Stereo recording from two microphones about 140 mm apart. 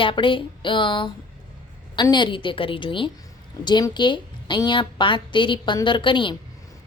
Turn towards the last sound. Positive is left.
turn(degrees=35)  # may be behind; listen again after turning